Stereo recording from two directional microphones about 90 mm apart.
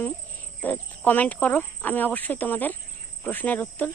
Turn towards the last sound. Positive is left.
turn(degrees=20)  # may be behind; listen again after turning